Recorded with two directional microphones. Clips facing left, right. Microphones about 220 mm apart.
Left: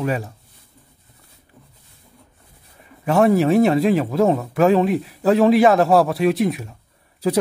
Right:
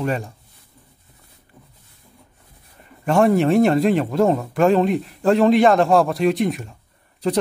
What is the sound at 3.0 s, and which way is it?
A man's voice, centre (ahead or behind).